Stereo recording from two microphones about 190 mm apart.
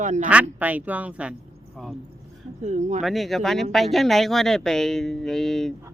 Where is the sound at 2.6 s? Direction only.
40° right (ahead or behind).